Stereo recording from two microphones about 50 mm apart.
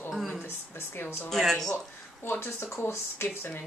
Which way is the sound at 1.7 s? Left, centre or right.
Left.